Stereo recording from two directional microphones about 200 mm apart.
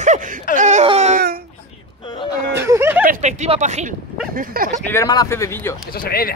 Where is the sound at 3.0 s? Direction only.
35° right (ahead or behind).